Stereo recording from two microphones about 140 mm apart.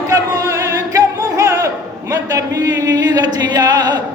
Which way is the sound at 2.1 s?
25° right (ahead or behind).